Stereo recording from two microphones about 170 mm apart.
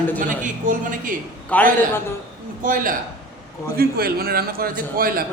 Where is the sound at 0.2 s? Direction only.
50° right (ahead or behind).